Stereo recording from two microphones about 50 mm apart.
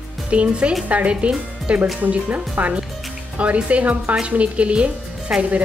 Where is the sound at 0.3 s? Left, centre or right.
Right.